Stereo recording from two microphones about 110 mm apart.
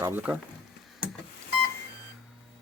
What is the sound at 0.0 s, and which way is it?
Speech, 15° right (ahead or behind).